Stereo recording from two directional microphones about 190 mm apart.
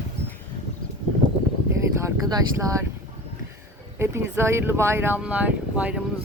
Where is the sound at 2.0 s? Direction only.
20° right (ahead or behind).